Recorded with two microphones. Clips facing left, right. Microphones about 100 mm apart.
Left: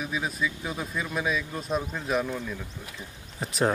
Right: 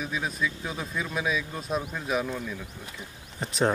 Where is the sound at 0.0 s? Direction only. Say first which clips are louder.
Even; centre (ahead or behind).